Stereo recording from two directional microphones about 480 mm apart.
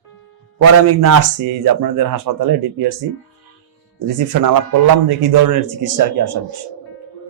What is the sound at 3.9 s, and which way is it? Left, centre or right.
Speech, right.